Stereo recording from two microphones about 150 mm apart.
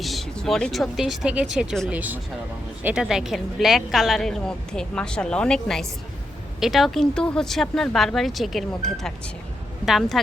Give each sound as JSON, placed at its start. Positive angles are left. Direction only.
{"t": 0.0, "sound": "a woman's voice", "side_deg": 0}